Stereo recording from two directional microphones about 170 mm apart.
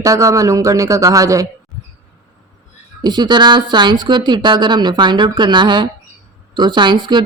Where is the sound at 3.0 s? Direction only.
25° right (ahead or behind).